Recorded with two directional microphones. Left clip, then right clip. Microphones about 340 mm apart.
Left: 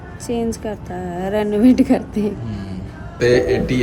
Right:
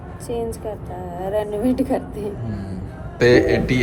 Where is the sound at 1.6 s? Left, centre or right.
Left.